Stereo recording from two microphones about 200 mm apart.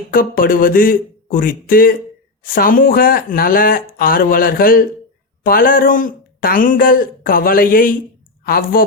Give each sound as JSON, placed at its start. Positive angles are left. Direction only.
{"t": 0.1, "sound": "speech", "side_deg": 45}